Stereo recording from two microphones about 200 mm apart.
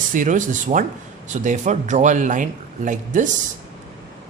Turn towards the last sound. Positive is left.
turn(degrees=-40)  # may be behind; listen again after turning